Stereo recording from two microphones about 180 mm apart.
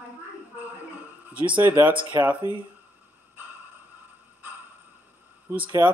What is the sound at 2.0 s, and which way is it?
Speech, 25° right (ahead or behind).